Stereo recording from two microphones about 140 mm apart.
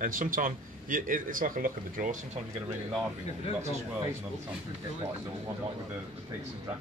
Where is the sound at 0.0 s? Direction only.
75° right (ahead or behind).